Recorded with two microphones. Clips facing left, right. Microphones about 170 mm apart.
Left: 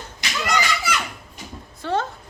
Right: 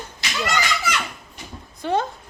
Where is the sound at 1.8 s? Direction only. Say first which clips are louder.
Right 2 dB; 15° right (ahead or behind).